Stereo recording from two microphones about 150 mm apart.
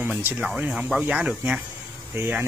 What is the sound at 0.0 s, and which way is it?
Speech, 15° right (ahead or behind).